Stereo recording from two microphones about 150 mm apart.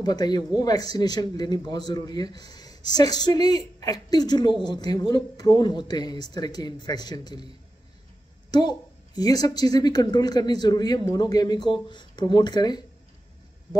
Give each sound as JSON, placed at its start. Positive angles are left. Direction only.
{"t": 0.0, "sound": "a woman's voice", "side_deg": 25}
{"t": 8.5, "sound": "a woman's voice", "side_deg": 25}